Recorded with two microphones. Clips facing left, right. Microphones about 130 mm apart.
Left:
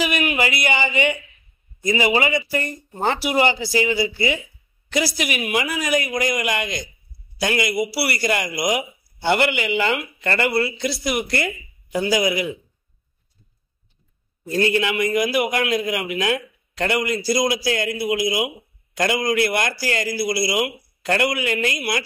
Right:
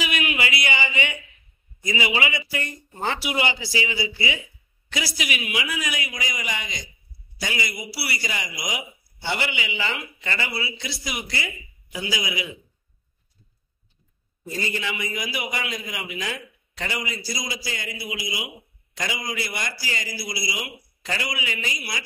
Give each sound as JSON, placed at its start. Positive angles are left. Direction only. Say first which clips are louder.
{"t": 0.0, "sound": "a sound", "louder": "left 5 dB", "side_deg": 45}
{"t": 1.9, "sound": "a man's voice", "louder": "left 6 dB", "side_deg": 45}
{"t": 11.9, "sound": "speech", "louder": "left 10 dB", "side_deg": 50}
{"t": 14.5, "sound": "a man's voice", "louder": "left 9 dB", "side_deg": 65}